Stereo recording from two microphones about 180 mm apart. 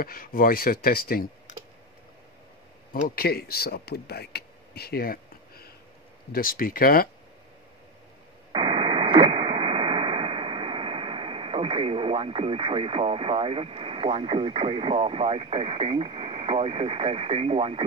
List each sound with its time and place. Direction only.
0.0 s speech: 50° left (ahead or behind)
2.9 s speech: 55° left (ahead or behind)
8.5 s radio: 30° right (ahead or behind)